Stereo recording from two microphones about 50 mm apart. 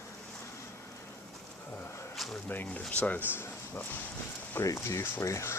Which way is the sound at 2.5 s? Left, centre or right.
Left.